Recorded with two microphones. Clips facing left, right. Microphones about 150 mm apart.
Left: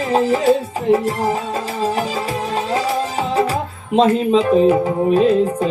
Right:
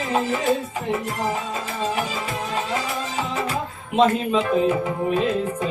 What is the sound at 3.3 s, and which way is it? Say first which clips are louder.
Music: left 7 dB; 35° left (ahead or behind).